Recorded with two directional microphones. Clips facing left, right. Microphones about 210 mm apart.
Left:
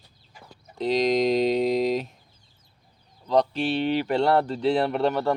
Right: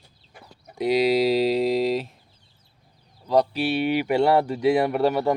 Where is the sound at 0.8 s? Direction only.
10° right (ahead or behind).